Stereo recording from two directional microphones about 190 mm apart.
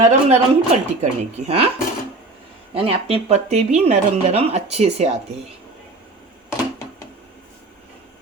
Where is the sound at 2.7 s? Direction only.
30° right (ahead or behind).